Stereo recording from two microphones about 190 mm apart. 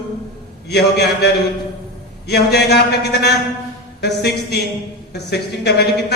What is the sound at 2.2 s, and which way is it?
A man's voice, 60° left (ahead or behind).